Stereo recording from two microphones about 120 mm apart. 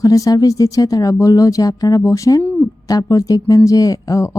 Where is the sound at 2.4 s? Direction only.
15° left (ahead or behind).